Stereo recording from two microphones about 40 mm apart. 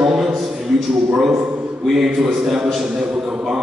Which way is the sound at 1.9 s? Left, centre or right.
Centre.